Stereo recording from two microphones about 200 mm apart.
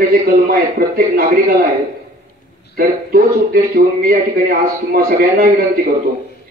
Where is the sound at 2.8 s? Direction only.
50° right (ahead or behind).